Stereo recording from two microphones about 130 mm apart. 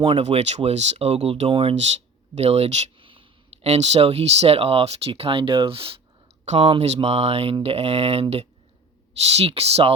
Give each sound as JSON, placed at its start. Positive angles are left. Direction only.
{"t": 0.0, "sound": "speech", "side_deg": -45}
{"t": 3.0, "sound": "speech", "side_deg": -40}
{"t": 6.4, "sound": "a sound", "side_deg": -60}
{"t": 6.7, "sound": "speech", "side_deg": -50}